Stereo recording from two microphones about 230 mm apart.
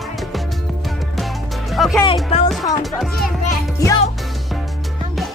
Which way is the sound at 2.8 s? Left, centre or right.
Centre.